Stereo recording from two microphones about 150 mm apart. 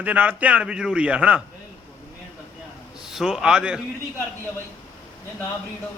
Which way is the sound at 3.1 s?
5° right (ahead or behind).